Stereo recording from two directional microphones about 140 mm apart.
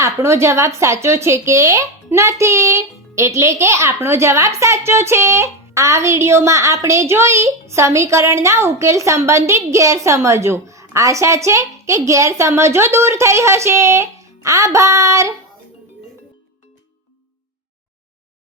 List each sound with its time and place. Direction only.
0.0 s a woman's voice: 20° right (ahead or behind)